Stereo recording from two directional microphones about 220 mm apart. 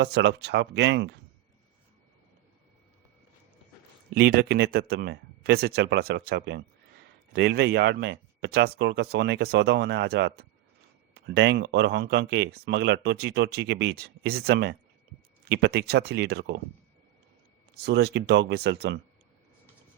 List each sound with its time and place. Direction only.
0.0 s speech: 50° right (ahead or behind)
4.1 s speech: 45° right (ahead or behind)
17.8 s speech: 50° right (ahead or behind)